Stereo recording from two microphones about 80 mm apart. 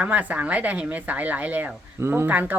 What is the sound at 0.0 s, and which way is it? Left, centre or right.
Speech, centre.